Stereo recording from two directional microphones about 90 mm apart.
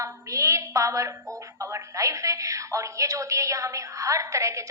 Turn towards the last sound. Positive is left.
turn(degrees=-35)  # may be behind; listen again after turning